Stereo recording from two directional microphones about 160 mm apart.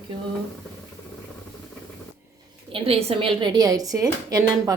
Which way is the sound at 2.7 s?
35° right (ahead or behind).